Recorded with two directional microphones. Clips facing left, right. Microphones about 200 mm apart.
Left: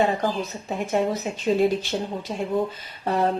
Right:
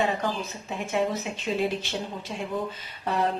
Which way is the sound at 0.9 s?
40° left (ahead or behind).